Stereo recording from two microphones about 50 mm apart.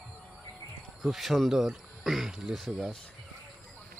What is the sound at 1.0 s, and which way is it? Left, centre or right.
Speech, centre.